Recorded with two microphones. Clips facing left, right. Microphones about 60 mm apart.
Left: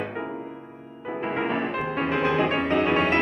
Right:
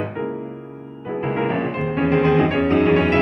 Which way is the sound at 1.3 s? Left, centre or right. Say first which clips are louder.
Right 4 dB; right.